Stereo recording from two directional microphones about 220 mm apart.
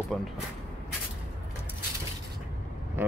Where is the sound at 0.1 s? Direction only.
5° left (ahead or behind).